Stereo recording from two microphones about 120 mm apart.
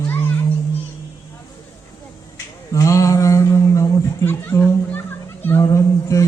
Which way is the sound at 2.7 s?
25° left (ahead or behind).